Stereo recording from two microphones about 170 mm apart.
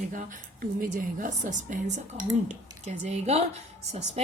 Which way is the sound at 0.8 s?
50° right (ahead or behind).